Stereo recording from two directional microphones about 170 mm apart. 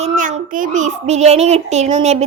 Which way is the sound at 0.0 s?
45° right (ahead or behind).